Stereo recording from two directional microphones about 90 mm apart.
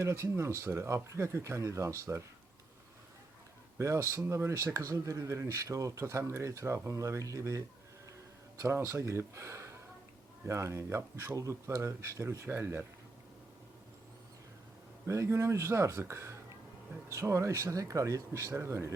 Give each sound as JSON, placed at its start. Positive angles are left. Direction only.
{"t": 0.0, "sound": "speech", "side_deg": -30}
{"t": 3.8, "sound": "speech", "side_deg": -35}
{"t": 8.6, "sound": "speech", "side_deg": -35}
{"t": 15.0, "sound": "speech", "side_deg": -35}